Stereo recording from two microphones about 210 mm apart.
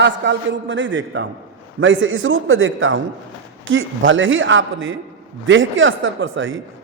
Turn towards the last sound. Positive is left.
turn(degrees=-65)  # may be behind; listen again after turning